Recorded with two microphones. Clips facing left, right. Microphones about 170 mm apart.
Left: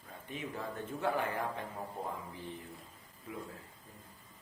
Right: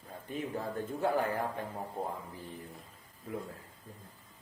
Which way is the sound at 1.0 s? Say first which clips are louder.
Right 3 dB; 35° right (ahead or behind).